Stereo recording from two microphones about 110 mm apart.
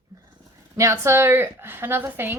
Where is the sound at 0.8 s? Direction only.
25° right (ahead or behind).